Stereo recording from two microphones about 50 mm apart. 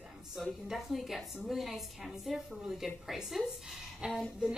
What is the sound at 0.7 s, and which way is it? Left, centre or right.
A woman's voice, centre.